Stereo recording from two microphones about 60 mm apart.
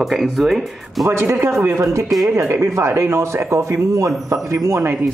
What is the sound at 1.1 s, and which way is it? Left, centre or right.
Speech, right.